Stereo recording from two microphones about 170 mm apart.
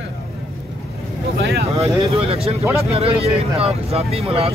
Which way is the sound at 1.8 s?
35° right (ahead or behind).